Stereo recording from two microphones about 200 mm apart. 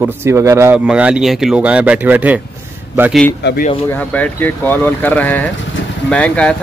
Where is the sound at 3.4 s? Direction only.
55° left (ahead or behind).